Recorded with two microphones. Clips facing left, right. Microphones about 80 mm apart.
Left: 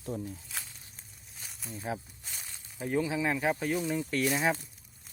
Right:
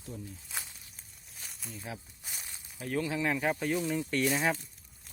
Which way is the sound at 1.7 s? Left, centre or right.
Left.